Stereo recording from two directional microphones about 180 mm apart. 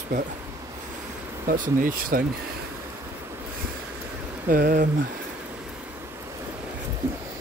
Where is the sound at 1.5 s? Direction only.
50° right (ahead or behind).